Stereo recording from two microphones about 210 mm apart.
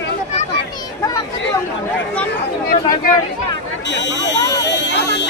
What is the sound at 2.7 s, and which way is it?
Speech, 40° left (ahead or behind).